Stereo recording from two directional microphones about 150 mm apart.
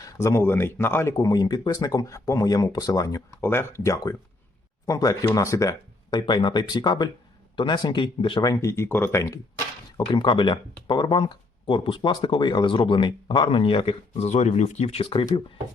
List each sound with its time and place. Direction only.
0.0 s speech: 20° left (ahead or behind)
10.1 s speech: 30° left (ahead or behind)
14.1 s speech: 50° left (ahead or behind)